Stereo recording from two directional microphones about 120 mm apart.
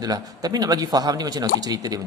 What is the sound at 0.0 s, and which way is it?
A man's voice, 30° right (ahead or behind).